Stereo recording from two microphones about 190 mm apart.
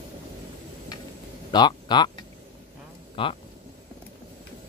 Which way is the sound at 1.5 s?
20° left (ahead or behind).